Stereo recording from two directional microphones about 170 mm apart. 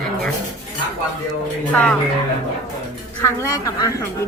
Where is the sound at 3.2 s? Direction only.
15° left (ahead or behind).